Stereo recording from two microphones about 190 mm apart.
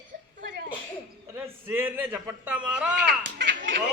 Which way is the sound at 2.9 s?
65° right (ahead or behind).